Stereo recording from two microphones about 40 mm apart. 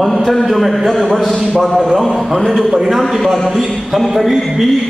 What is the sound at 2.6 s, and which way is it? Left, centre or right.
Speech, centre.